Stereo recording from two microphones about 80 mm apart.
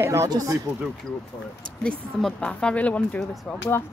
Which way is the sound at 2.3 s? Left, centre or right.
Centre.